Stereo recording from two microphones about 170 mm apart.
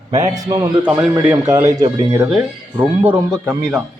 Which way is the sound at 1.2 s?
10° right (ahead or behind).